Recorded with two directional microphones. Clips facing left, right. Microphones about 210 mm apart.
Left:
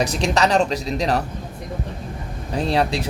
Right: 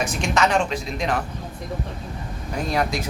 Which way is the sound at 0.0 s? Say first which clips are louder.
Left 3 dB; 35° left (ahead or behind).